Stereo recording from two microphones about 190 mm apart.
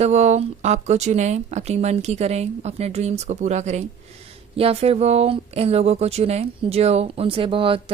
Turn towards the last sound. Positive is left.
turn(degrees=-30)  # may be behind; listen again after turning